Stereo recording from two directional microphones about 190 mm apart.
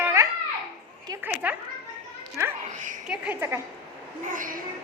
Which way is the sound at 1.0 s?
15° right (ahead or behind).